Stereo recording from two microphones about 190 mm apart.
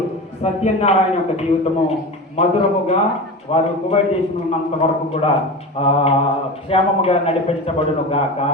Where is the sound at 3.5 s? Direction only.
30° left (ahead or behind).